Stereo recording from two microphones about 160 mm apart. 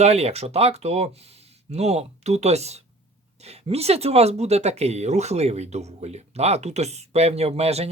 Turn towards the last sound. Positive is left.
turn(degrees=-40)  # may be behind; listen again after turning